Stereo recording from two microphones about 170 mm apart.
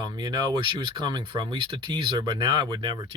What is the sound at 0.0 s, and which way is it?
Speech, 25° right (ahead or behind).